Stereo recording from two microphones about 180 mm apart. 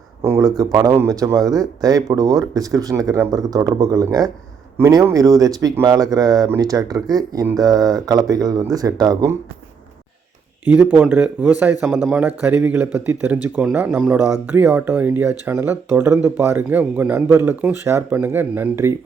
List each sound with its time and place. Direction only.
0.2 s a sound: 15° right (ahead or behind)
0.6 s speech: 20° right (ahead or behind)
10.7 s speech: 10° right (ahead or behind)